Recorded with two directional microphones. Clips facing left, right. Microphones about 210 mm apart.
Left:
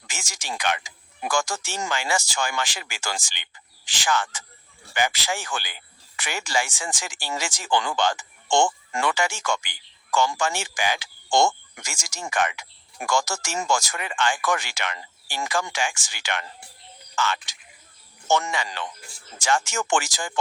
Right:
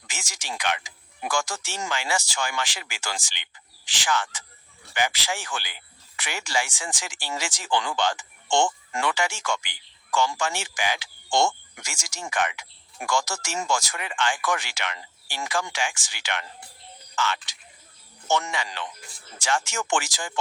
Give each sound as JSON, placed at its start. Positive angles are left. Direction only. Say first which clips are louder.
{"t": 0.1, "sound": "speech", "louder": "left 2 dB", "side_deg": 45}